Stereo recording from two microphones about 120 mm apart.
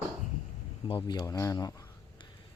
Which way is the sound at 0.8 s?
40° left (ahead or behind).